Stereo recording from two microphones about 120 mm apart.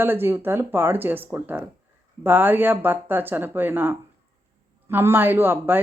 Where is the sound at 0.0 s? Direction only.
20° right (ahead or behind).